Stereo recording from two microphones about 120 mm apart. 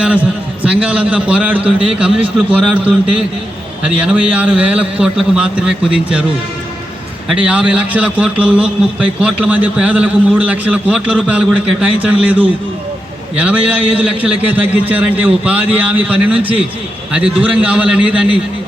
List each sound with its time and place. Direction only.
0.6 s a man's voice: 10° right (ahead or behind)
7.3 s a man's voice: 10° right (ahead or behind)